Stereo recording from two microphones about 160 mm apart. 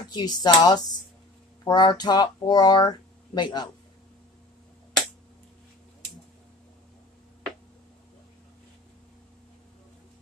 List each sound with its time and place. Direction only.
0.1 s speech: 25° left (ahead or behind)